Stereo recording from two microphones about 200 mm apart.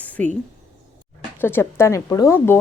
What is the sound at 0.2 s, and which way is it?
Speech, 5° left (ahead or behind).